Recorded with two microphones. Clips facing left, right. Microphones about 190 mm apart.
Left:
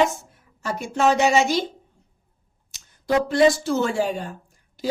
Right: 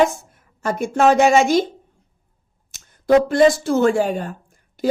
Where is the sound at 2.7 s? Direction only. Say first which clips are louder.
Right 7 dB; 50° right (ahead or behind).